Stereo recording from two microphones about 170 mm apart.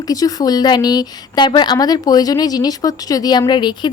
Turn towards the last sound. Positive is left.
turn(degrees=25)  # may be behind; listen again after turning